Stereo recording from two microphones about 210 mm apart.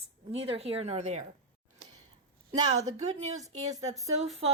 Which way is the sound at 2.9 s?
35° right (ahead or behind).